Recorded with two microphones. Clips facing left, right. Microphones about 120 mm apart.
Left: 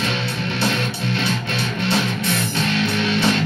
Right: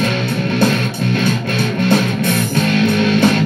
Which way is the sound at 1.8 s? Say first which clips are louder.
Right 7 dB; 50° right (ahead or behind).